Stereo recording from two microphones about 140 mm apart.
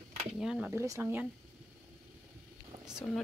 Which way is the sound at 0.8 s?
20° right (ahead or behind).